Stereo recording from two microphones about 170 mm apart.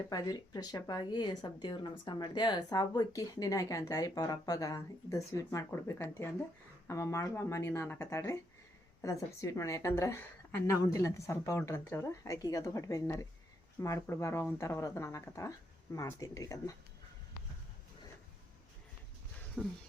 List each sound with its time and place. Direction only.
0.1 s a woman's voice: 20° left (ahead or behind)
19.6 s a woman's voice: 10° left (ahead or behind)